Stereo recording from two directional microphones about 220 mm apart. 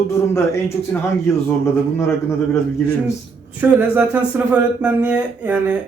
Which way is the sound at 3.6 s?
5° right (ahead or behind).